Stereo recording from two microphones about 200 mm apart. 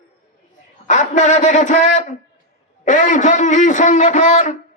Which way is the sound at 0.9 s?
40° left (ahead or behind).